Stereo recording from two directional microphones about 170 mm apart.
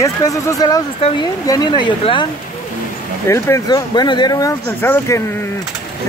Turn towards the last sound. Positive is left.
turn(degrees=15)  # may be behind; listen again after turning